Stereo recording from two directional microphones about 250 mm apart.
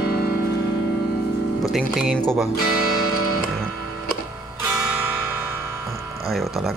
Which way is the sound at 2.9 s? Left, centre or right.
Left.